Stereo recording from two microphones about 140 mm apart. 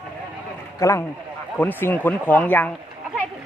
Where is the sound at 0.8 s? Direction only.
20° left (ahead or behind).